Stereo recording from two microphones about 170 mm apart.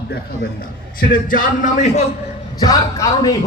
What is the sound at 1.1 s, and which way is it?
Speech, 50° left (ahead or behind).